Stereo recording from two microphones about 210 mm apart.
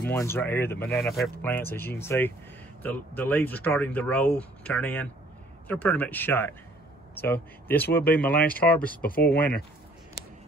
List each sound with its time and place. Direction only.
0.1 s speech: 10° left (ahead or behind)
7.9 s speech: 45° left (ahead or behind)
8.5 s speech: 5° left (ahead or behind)
9.0 s speech: 45° left (ahead or behind)